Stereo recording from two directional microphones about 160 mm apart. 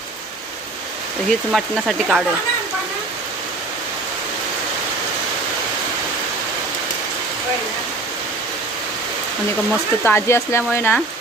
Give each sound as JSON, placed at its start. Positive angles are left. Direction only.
{"t": 1.3, "sound": "speech", "side_deg": 0}
{"t": 10.0, "sound": "speech", "side_deg": 15}